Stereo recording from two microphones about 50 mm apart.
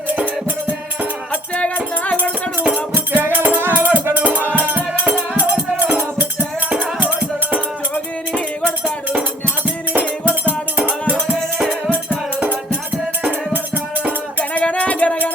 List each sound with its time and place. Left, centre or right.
1.3 s music: left
2.9 s music: right
10.2 s music: right
14.5 s music: left